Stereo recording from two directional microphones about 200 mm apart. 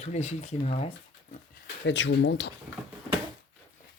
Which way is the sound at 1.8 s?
65° left (ahead or behind).